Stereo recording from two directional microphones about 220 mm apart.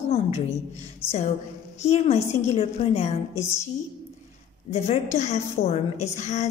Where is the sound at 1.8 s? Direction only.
30° left (ahead or behind).